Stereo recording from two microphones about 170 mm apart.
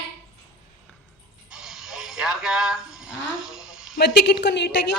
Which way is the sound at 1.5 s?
5° right (ahead or behind).